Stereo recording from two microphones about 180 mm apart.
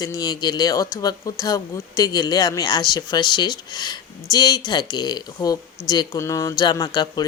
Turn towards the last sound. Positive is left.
turn(degrees=20)  # may be behind; listen again after turning